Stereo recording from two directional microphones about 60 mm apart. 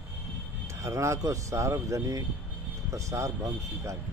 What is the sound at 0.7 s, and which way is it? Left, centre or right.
Speech, right.